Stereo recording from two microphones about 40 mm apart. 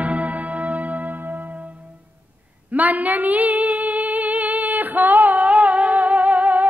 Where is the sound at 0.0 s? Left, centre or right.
Right.